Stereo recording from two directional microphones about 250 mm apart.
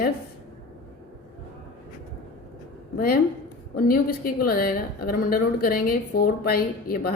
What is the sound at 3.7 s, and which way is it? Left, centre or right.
Speech, left.